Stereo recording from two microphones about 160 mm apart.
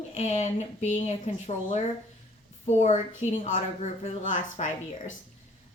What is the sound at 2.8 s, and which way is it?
A woman's voice, 45° left (ahead or behind).